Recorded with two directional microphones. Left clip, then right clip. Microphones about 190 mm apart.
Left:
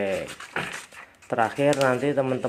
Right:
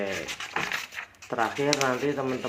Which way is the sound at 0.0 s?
30° left (ahead or behind).